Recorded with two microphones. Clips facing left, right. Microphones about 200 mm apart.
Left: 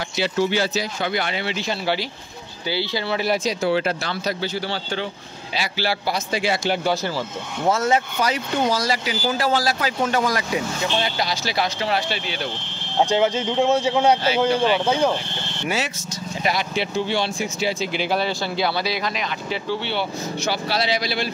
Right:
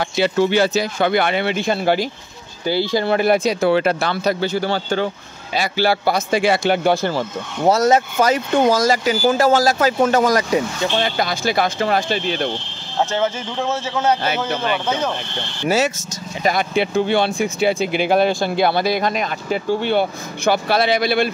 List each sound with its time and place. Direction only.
0.0 s speech: 55° right (ahead or behind)
7.6 s speech: 40° right (ahead or behind)
13.0 s speech: 15° left (ahead or behind)
15.6 s speech: 40° right (ahead or behind)
16.4 s speech: 55° right (ahead or behind)